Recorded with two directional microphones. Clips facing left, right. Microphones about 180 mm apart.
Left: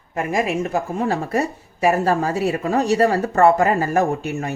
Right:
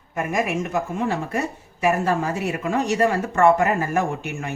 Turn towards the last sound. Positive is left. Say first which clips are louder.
# left 5 dB
turn(degrees=35)  # may be behind; listen again after turning